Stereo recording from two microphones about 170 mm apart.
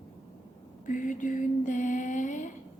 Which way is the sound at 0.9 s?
50° left (ahead or behind).